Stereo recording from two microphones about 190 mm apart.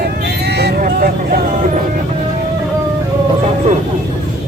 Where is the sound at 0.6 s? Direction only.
55° right (ahead or behind).